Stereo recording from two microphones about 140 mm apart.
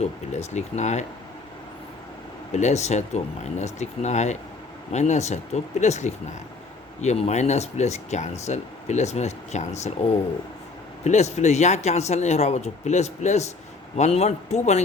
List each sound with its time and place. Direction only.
0.0 s speech: 55° left (ahead or behind)
2.5 s speech: 55° left (ahead or behind)
11.0 s speech: 55° left (ahead or behind)